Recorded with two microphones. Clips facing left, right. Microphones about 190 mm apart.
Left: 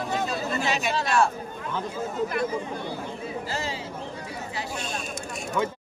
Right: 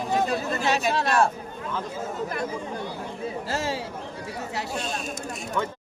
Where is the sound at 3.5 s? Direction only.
70° right (ahead or behind).